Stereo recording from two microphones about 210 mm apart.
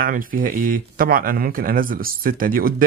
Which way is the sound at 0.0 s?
40° right (ahead or behind).